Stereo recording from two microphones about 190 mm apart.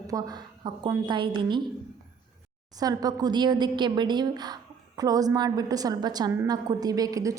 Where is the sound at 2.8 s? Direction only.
20° right (ahead or behind).